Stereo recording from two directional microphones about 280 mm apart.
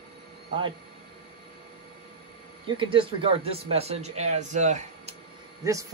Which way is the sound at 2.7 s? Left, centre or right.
Centre.